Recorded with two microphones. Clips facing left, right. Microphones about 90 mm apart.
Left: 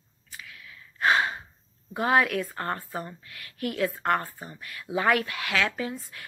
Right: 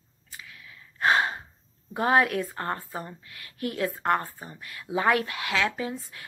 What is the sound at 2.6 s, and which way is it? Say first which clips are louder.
Speech: even; 20° right (ahead or behind).